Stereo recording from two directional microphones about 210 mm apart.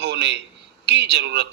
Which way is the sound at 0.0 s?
55° right (ahead or behind).